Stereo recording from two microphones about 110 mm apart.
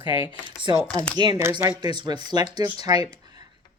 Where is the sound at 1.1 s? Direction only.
40° right (ahead or behind).